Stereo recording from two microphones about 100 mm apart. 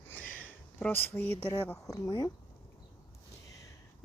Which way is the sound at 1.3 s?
70° left (ahead or behind).